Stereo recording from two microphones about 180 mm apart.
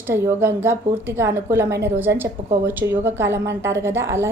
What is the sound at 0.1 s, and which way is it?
A woman's voice, 15° right (ahead or behind).